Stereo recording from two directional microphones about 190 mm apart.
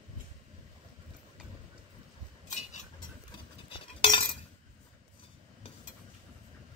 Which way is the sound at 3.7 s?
25° left (ahead or behind).